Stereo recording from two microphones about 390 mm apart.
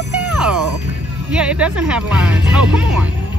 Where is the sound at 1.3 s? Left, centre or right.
Centre.